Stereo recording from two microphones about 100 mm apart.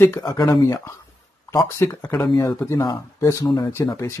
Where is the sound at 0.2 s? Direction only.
40° left (ahead or behind).